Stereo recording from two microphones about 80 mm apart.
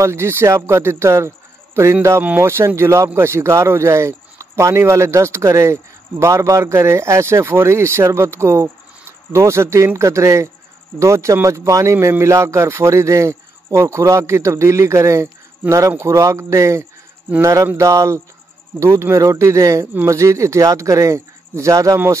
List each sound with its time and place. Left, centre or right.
0.0 s speech: right
17.4 s mantra: right
17.7 s speech: right